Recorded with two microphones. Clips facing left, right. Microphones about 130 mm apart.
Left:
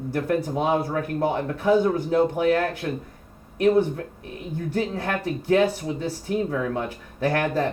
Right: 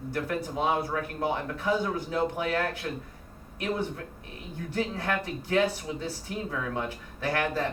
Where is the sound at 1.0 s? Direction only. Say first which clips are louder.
Left 6 dB; 45° left (ahead or behind).